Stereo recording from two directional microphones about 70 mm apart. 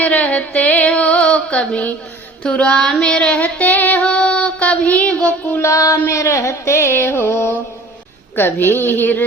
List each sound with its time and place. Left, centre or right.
0.0 s female singing: centre
5.5 s music: left
8.4 s a woman's voice: left